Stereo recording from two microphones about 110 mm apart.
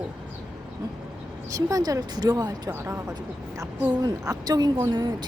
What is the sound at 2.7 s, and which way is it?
A woman's voice, 25° right (ahead or behind).